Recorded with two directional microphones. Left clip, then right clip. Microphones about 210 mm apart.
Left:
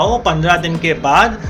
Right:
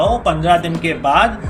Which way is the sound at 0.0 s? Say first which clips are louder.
Left 1 dB; 55° left (ahead or behind).